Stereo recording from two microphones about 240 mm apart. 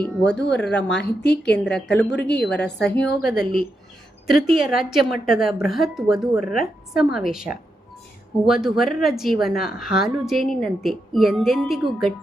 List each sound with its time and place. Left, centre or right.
0.3 s a woman's voice: left
1.5 s speech: centre
2.3 s a woman's voice: left
2.6 s speech: centre